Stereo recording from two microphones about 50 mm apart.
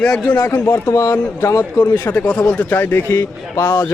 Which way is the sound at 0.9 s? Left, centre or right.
Left.